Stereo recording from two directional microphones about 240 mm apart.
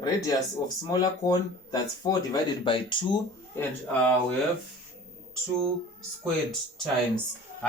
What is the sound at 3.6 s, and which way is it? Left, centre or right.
Speech, centre.